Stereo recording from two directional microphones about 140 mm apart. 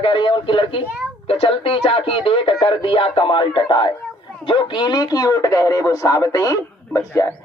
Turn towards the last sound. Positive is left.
turn(degrees=20)  # may be behind; listen again after turning